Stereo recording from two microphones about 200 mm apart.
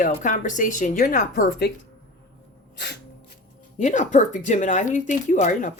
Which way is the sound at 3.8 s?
35° left (ahead or behind).